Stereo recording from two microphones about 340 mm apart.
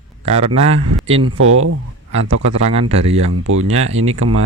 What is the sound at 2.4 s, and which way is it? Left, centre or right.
Speech, right.